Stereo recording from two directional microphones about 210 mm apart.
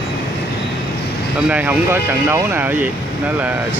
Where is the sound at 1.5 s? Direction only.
5° right (ahead or behind).